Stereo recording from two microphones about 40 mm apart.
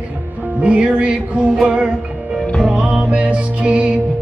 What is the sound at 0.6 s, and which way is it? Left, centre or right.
Music, right.